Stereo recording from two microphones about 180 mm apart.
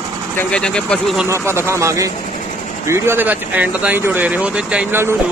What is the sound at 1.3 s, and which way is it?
Speech, 15° right (ahead or behind).